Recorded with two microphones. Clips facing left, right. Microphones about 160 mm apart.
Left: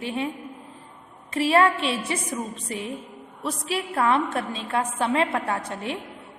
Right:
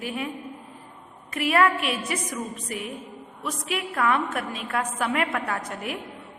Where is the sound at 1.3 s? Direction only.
30° left (ahead or behind).